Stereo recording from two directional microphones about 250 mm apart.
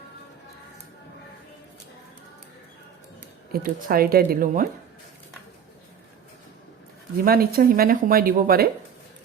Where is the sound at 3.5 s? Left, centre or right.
Right.